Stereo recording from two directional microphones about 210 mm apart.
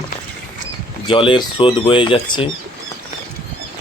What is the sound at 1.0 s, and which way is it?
Speech, 25° left (ahead or behind).